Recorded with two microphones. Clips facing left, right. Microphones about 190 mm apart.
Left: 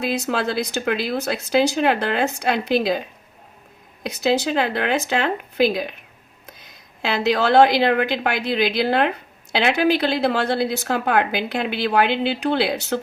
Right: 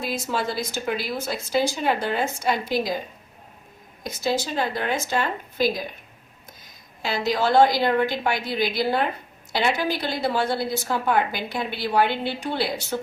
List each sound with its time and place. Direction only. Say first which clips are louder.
0.0 s a woman's voice: left 4 dB; 70° left (ahead or behind)
4.0 s a woman's voice: left 5 dB; 65° left (ahead or behind)